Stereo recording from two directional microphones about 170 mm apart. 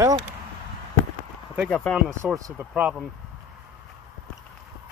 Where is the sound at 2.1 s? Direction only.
15° right (ahead or behind).